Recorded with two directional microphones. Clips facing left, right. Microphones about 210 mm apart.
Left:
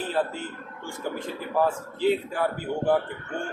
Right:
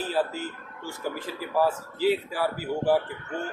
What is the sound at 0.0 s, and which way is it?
Speech, 5° right (ahead or behind).